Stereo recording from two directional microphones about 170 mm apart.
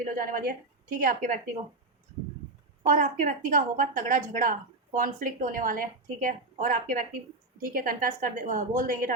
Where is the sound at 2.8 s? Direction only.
50° right (ahead or behind).